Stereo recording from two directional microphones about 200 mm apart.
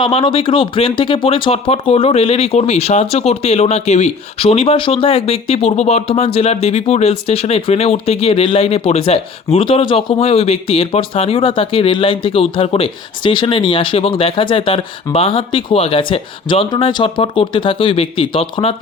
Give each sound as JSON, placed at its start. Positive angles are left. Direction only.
{"t": 0.0, "sound": "speech", "side_deg": 25}